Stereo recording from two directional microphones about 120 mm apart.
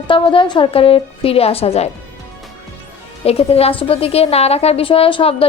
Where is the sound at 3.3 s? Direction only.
55° left (ahead or behind).